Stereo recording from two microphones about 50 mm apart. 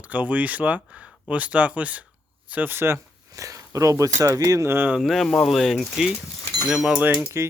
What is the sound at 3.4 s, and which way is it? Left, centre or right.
Speech, right.